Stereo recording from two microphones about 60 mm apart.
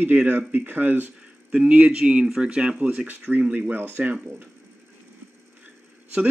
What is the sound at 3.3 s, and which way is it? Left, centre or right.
Speech, right.